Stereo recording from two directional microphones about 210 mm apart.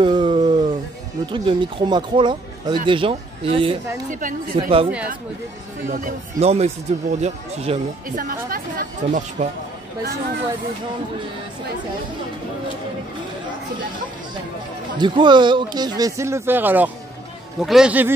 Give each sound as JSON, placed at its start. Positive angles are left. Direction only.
{"t": 0.0, "sound": "a sound", "side_deg": -20}
{"t": 1.2, "sound": "speech", "side_deg": -25}
{"t": 4.1, "sound": "speech", "side_deg": -40}
{"t": 4.6, "sound": "speech", "side_deg": -25}
{"t": 5.9, "sound": "speech", "side_deg": -40}
{"t": 8.2, "sound": "speech", "side_deg": -40}
{"t": 15.0, "sound": "a man's voice", "side_deg": -20}